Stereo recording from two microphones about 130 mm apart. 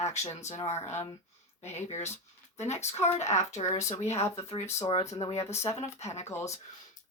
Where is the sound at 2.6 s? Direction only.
60° left (ahead or behind).